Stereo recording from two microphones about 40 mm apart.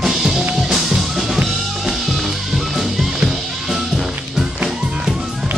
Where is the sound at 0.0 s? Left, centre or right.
Centre.